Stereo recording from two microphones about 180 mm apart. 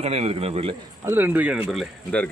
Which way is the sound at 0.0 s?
35° right (ahead or behind).